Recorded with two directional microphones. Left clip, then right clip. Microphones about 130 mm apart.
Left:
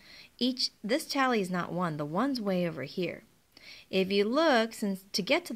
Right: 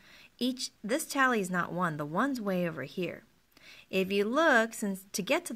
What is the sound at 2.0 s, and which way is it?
Speech, 10° left (ahead or behind).